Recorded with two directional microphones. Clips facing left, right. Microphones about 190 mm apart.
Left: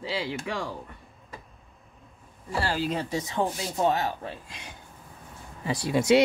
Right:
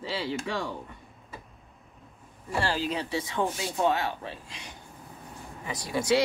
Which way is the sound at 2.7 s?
45° left (ahead or behind).